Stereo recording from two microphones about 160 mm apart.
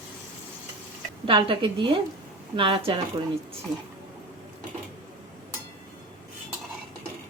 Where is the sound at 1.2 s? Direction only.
30° right (ahead or behind).